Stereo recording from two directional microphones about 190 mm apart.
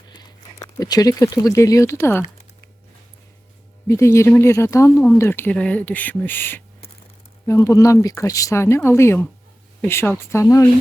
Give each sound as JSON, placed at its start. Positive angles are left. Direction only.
{"t": 0.1, "sound": "speech", "side_deg": 20}
{"t": 3.8, "sound": "speech", "side_deg": 15}